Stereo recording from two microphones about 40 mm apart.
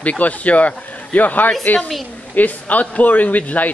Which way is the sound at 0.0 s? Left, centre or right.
Left.